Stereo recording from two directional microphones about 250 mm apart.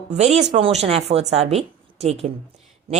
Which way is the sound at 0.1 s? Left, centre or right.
Right.